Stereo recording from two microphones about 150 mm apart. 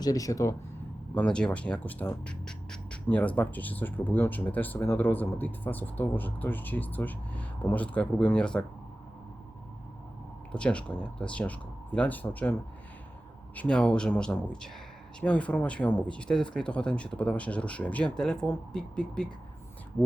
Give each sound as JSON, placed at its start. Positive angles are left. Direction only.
{"t": 0.0, "sound": "speech", "side_deg": 25}
{"t": 1.1, "sound": "speech", "side_deg": 10}
{"t": 10.5, "sound": "speech", "side_deg": 5}
{"t": 13.6, "sound": "speech", "side_deg": 5}